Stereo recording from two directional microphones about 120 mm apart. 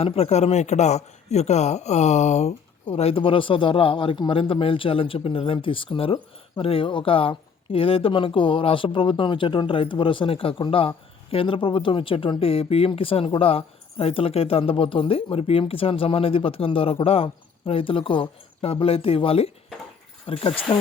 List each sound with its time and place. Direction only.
0.0 s a man's voice: 60° left (ahead or behind)
2.8 s speech: 55° left (ahead or behind)